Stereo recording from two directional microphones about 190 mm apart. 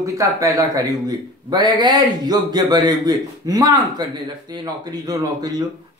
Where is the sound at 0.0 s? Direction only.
15° right (ahead or behind).